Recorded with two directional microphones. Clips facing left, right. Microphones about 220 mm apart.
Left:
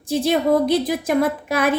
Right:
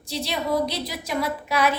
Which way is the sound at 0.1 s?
50° left (ahead or behind).